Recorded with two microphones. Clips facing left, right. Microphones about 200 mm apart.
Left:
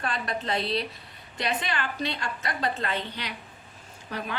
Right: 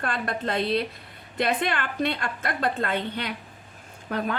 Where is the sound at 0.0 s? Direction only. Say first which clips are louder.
Right 3 dB; 55° right (ahead or behind).